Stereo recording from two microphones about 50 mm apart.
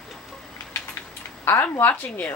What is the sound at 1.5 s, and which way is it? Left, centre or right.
Speech, left.